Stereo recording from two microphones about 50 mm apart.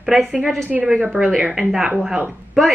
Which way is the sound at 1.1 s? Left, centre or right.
Centre.